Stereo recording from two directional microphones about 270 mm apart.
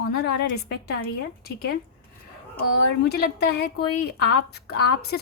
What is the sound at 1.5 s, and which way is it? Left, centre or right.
Speech, left.